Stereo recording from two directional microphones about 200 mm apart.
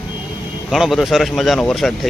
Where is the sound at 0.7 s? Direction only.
Centre (ahead or behind).